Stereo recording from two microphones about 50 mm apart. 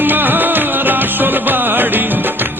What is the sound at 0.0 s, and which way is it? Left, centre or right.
Music, right.